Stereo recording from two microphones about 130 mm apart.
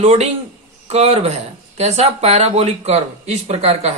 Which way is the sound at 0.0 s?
55° right (ahead or behind).